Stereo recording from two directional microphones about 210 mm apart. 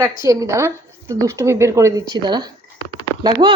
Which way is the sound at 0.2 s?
15° right (ahead or behind).